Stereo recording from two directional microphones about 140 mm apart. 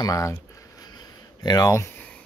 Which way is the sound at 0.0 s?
25° left (ahead or behind).